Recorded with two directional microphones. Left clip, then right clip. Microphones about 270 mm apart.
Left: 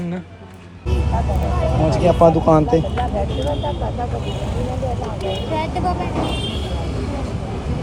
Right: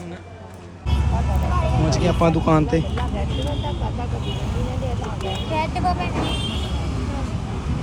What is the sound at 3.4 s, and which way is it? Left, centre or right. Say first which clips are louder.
Speech: left 6 dB; right.